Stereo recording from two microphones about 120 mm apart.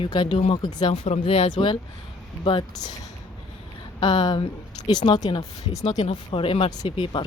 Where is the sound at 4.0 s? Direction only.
35° left (ahead or behind).